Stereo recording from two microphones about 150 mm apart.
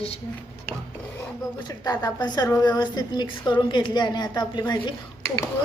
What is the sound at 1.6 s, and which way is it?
A woman's voice, 25° left (ahead or behind).